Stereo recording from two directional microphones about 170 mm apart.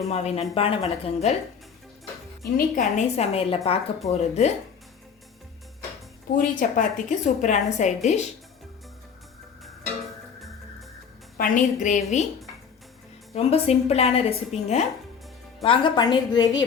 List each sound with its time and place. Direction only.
0.1 s a woman's voice: 40° left (ahead or behind)
2.6 s a woman's voice: 50° left (ahead or behind)
6.3 s a woman's voice: 50° left (ahead or behind)
11.3 s a woman's voice: 50° left (ahead or behind)
13.3 s a woman's voice: 35° left (ahead or behind)